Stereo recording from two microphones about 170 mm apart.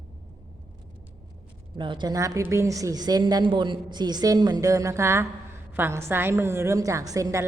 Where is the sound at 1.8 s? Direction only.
25° right (ahead or behind).